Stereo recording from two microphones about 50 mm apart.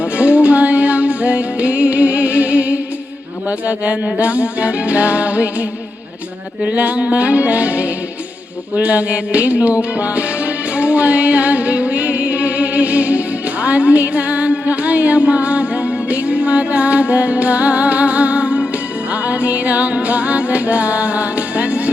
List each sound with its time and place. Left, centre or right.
0.0 s music: right
6.7 s music: right